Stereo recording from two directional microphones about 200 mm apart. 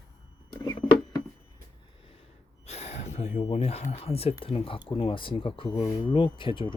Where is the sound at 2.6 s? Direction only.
30° left (ahead or behind).